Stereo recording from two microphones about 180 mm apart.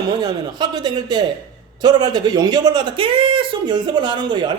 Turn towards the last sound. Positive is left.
turn(degrees=-25)  # may be behind; listen again after turning